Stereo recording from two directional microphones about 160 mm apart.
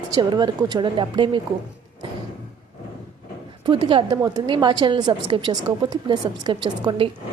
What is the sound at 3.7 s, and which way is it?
A woman's voice, 30° right (ahead or behind).